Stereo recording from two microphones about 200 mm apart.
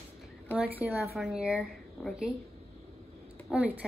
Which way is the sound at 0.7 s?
10° right (ahead or behind).